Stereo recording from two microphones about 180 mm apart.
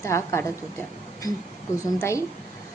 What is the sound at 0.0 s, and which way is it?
A woman's voice, 15° left (ahead or behind).